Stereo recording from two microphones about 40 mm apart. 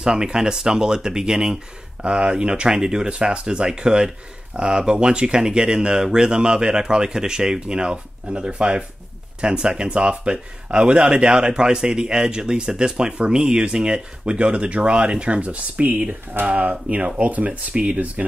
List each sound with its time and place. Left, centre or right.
0.0 s speech: centre; by 18.2 s right